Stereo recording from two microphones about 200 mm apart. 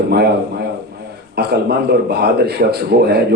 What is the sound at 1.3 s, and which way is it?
A man's voice, 55° right (ahead or behind).